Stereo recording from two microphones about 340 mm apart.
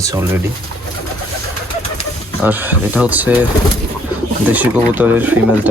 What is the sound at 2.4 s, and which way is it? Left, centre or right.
Speech, centre.